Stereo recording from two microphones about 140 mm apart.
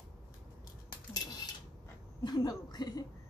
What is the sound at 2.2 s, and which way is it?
Speech, 30° left (ahead or behind).